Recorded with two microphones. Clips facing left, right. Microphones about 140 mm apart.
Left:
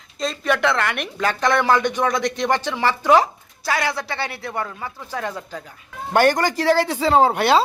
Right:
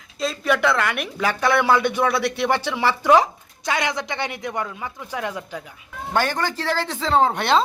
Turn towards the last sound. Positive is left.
turn(degrees=5)  # may be behind; listen again after turning